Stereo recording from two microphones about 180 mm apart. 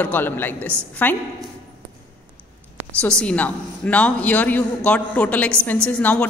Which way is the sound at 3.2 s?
5° left (ahead or behind).